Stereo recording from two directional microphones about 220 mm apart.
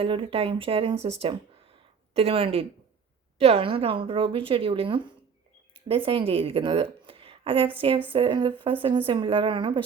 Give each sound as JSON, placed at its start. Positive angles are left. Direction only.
{"t": 0.0, "sound": "a woman's voice", "side_deg": -25}
{"t": 2.1, "sound": "a woman's voice", "side_deg": -25}